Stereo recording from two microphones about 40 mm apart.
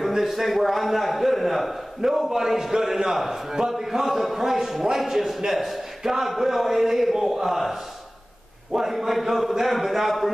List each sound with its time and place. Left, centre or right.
0.1 s a man's voice: centre
8.7 s a man's voice: centre